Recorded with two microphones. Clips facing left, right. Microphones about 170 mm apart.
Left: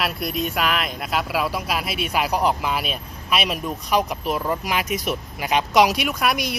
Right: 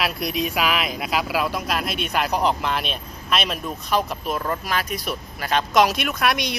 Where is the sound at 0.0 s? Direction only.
Centre (ahead or behind).